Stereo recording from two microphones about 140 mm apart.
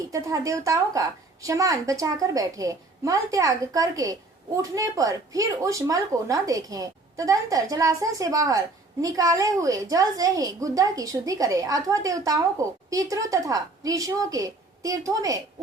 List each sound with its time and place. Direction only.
0.1 s a woman's voice: 25° right (ahead or behind)